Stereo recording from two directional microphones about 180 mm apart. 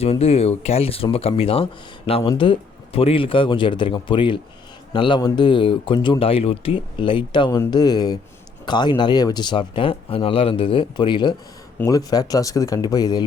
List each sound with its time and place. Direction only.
0.0 s speech: 35° left (ahead or behind)